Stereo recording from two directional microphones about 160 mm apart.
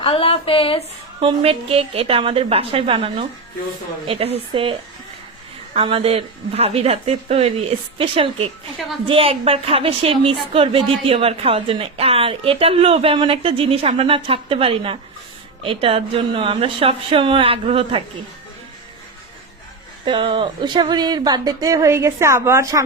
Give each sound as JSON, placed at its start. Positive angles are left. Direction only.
{"t": 0.0, "sound": "speech", "side_deg": 35}
{"t": 1.2, "sound": "a woman's voice", "side_deg": -35}
{"t": 20.1, "sound": "speech", "side_deg": -30}